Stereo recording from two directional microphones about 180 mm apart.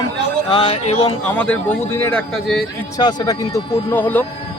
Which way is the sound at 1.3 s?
10° left (ahead or behind).